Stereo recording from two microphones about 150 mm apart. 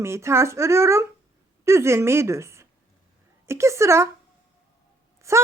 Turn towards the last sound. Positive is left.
turn(degrees=-20)  # may be behind; listen again after turning